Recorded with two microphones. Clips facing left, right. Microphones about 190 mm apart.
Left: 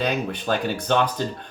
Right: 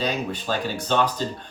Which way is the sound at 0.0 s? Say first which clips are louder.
Left 2 dB; 55° left (ahead or behind).